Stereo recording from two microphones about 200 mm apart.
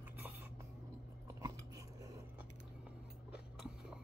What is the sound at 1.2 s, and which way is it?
Biting, 15° right (ahead or behind).